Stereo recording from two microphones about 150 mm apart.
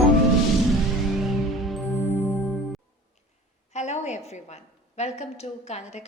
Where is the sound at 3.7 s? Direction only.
50° left (ahead or behind).